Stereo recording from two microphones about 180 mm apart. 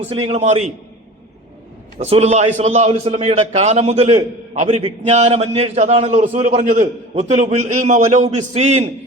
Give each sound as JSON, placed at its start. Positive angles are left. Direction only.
{"t": 0.1, "sound": "a man's voice", "side_deg": -35}
{"t": 2.0, "sound": "a man's voice", "side_deg": -35}